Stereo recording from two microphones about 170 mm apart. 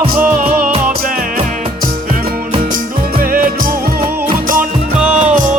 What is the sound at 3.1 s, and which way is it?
Music, 55° right (ahead or behind).